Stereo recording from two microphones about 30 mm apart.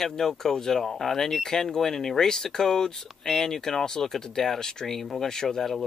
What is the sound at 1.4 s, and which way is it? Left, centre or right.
Speech, centre.